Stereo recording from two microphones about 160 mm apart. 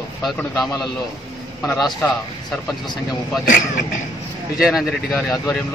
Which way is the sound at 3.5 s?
55° left (ahead or behind).